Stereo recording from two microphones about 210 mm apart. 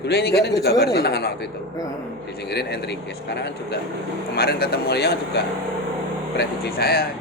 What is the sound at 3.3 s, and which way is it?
Speech, 55° left (ahead or behind).